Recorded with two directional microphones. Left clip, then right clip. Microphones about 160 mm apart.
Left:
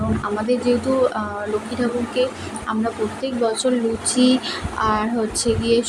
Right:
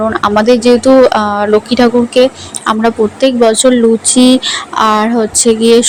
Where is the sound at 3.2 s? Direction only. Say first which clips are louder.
Right 14 dB; 50° right (ahead or behind).